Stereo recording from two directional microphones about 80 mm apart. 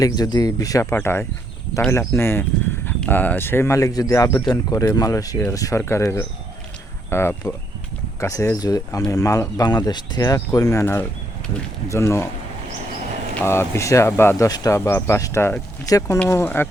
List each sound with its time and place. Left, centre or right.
0.0 s speech: left
0.9 s speech: left
8.5 s speech: left
9.6 s speech: left
11.9 s speech: left
13.4 s speech: left
14.8 s speech: left
16.3 s speech: left